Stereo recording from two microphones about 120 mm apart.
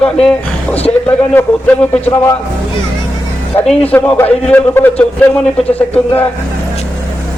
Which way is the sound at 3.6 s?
10° left (ahead or behind).